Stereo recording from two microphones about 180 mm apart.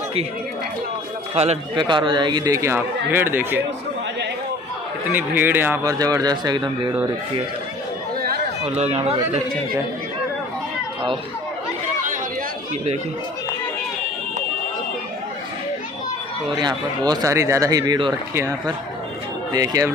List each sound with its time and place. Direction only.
1.3 s a man's voice: 35° right (ahead or behind); by 3.6 s 10° right (ahead or behind)
5.1 s a man's voice: 10° right (ahead or behind)
8.6 s speech: 35° right (ahead or behind)
16.4 s a man's voice: 25° right (ahead or behind)
19.5 s a man's voice: 20° right (ahead or behind)